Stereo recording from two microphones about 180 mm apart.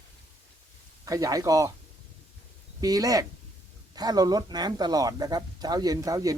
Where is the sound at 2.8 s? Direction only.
20° right (ahead or behind).